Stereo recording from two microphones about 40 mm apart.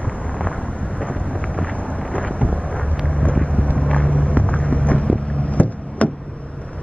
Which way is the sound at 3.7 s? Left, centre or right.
Left.